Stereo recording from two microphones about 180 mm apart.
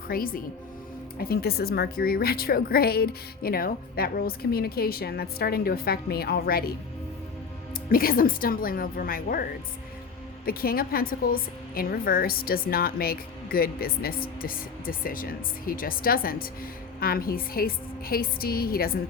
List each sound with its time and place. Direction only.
0.1 s a woman's voice: 55° left (ahead or behind)
7.9 s a woman's voice: 55° left (ahead or behind)